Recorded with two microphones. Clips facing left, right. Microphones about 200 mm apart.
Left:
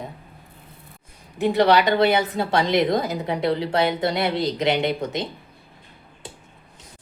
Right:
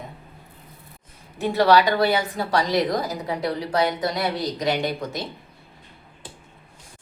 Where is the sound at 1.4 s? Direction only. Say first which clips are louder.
Even; 15° left (ahead or behind).